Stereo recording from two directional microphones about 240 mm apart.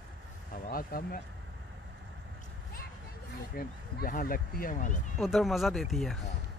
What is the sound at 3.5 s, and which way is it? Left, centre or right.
Speech, left.